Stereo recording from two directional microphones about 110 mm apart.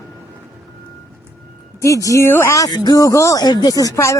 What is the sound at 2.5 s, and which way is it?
Speech, 35° left (ahead or behind).